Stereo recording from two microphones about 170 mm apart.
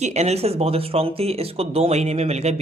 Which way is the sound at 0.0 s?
40° right (ahead or behind).